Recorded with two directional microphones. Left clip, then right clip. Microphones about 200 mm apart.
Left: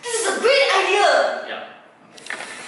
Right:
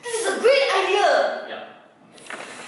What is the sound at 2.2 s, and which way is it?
Printer, 15° right (ahead or behind).